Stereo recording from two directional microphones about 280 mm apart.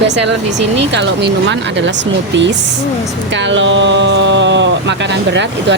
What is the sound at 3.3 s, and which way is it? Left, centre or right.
Speech, right.